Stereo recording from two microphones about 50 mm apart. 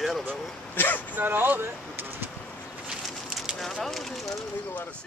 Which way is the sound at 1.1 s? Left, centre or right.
Right.